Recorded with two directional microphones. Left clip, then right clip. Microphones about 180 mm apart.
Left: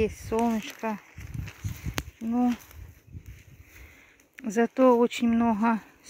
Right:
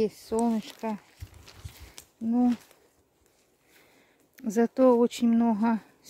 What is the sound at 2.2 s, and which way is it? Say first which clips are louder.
Speech: right 1 dB; 25° right (ahead or behind).